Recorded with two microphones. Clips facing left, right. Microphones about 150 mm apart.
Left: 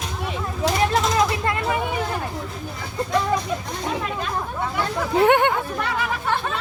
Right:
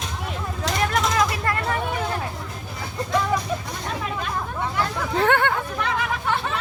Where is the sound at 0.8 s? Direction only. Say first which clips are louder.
Left 1 dB; 30° left (ahead or behind).